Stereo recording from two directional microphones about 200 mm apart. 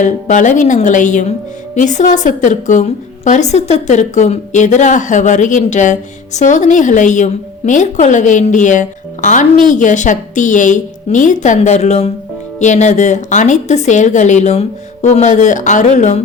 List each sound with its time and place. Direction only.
0.0 s a woman's voice: 40° left (ahead or behind)